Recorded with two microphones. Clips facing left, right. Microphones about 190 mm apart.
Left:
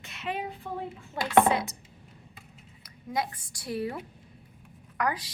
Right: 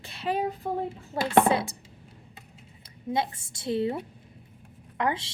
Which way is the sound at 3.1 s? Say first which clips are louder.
Right 3 dB; 25° right (ahead or behind).